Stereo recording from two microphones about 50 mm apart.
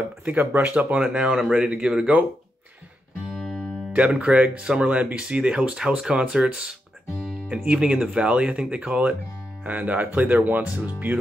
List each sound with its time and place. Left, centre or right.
0.5 s speech: right
1.1 s speech: centre
3.3 s music: centre
3.9 s speech: right